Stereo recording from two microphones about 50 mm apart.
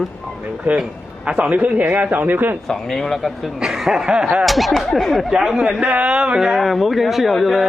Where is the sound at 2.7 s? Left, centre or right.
Centre; by 6.4 s right.